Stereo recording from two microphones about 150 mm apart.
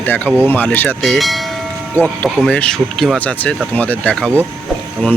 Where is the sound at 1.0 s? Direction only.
Centre (ahead or behind).